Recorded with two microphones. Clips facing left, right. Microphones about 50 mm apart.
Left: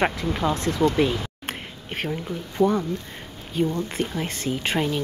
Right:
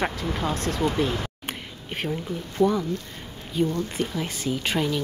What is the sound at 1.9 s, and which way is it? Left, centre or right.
Speech, centre.